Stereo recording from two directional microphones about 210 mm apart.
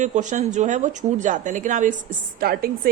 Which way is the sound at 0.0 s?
35° right (ahead or behind).